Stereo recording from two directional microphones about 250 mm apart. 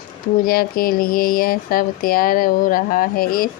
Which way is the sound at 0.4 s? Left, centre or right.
Left.